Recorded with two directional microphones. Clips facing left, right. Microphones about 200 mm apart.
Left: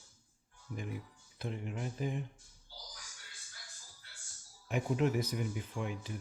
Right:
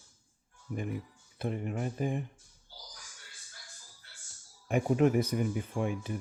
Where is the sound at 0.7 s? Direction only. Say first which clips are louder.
Right 6 dB; 50° right (ahead or behind).